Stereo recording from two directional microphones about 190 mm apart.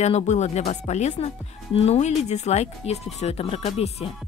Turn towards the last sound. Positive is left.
turn(degrees=30)  # may be behind; listen again after turning